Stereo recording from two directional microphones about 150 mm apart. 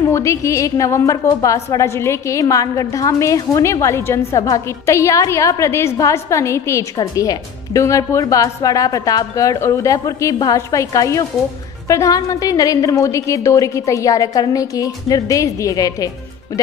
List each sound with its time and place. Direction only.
0.1 s a woman's voice: 20° left (ahead or behind)